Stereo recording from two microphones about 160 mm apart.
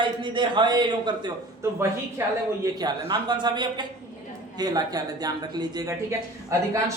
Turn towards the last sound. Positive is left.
turn(degrees=-20)  # may be behind; listen again after turning